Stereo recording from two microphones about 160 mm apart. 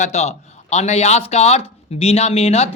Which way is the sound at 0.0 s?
45° left (ahead or behind).